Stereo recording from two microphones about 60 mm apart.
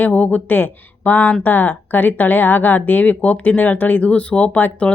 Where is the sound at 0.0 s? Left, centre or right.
Left.